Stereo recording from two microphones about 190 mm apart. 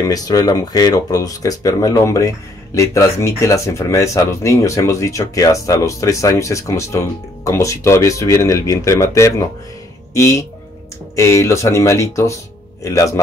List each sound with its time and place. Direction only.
0.0 s speech: 20° left (ahead or behind)